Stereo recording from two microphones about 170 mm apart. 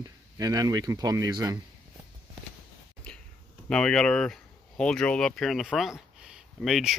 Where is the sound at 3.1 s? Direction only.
5° left (ahead or behind).